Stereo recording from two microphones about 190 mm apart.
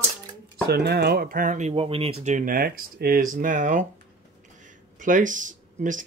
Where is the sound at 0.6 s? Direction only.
55° right (ahead or behind).